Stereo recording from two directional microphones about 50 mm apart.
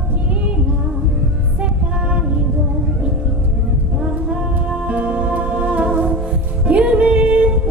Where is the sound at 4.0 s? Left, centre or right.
Right.